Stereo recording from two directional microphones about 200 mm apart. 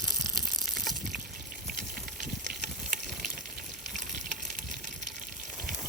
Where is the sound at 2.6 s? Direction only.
45° right (ahead or behind).